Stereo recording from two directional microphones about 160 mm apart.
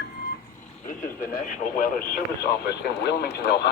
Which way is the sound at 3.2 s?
80° left.